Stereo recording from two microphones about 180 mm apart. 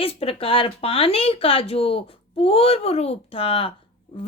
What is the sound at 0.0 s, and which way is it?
A woman's voice, 30° left (ahead or behind).